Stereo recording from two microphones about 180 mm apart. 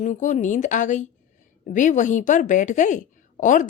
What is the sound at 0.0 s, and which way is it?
A woman's voice, 45° left (ahead or behind).